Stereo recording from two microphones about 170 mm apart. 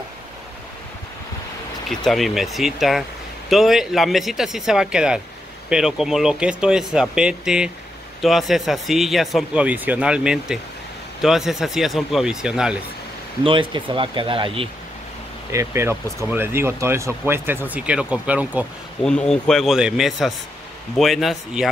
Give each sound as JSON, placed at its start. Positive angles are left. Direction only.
{"t": 1.9, "sound": "speech", "side_deg": 0}
{"t": 13.4, "sound": "speech", "side_deg": -30}
{"t": 15.5, "sound": "speech", "side_deg": -15}
{"t": 19.0, "sound": "speech", "side_deg": 5}